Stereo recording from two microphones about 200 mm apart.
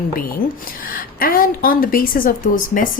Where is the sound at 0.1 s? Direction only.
45° left (ahead or behind).